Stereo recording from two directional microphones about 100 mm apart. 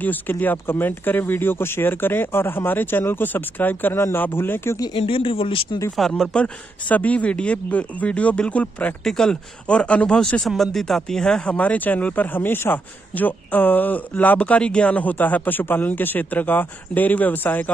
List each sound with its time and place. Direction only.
0.0 s speech: 20° left (ahead or behind)
4.9 s speech: 65° left (ahead or behind)
5.9 s speech: 5° left (ahead or behind)